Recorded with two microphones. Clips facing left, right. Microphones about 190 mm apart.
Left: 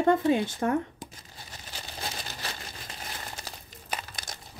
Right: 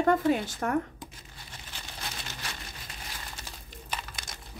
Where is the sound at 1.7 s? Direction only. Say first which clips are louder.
Left 4 dB; 35° left (ahead or behind).